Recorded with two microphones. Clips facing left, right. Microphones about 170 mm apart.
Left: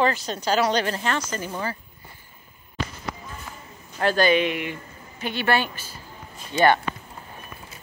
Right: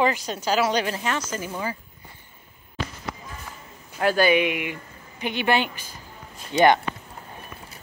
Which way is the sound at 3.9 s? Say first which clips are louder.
Even; 10° right (ahead or behind).